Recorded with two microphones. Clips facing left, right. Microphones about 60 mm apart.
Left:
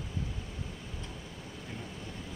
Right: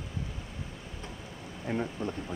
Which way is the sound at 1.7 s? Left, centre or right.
Right.